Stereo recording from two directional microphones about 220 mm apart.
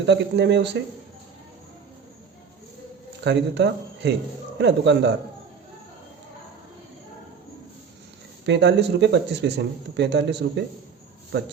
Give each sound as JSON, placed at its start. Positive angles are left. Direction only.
{"t": 0.0, "sound": "speech", "side_deg": -50}
{"t": 3.2, "sound": "speech", "side_deg": -50}
{"t": 8.4, "sound": "speech", "side_deg": -50}